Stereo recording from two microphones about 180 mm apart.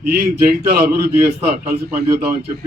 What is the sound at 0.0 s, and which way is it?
A man's voice, 55° right (ahead or behind).